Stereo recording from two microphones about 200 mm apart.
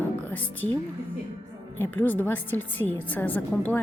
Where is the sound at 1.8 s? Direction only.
10° left (ahead or behind).